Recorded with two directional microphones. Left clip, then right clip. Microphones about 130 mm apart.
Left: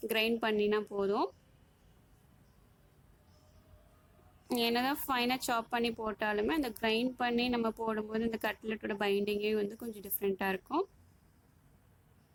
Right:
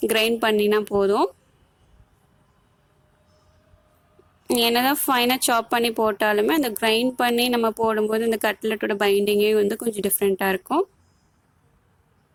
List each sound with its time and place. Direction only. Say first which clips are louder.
0.1 s speech: right 8 dB; 70° right (ahead or behind)
4.4 s speech: right 12 dB; 70° right (ahead or behind)